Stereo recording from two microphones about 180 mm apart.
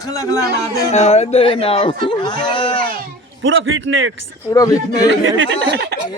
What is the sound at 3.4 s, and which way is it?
Speech, 90° right.